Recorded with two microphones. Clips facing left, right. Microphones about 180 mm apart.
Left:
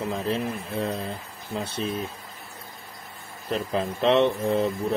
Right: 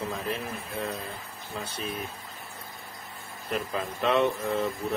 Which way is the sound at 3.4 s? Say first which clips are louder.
Left 4 dB; 25° left (ahead or behind).